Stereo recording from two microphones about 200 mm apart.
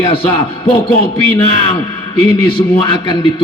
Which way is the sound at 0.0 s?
25° left (ahead or behind).